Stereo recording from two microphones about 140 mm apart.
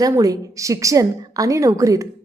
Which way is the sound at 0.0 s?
25° right (ahead or behind).